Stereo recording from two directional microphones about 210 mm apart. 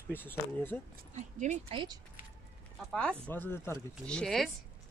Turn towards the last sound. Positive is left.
turn(degrees=0)  # may be behind; listen again after turning